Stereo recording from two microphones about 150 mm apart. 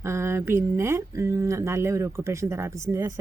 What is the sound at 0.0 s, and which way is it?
Speech, 15° right (ahead or behind).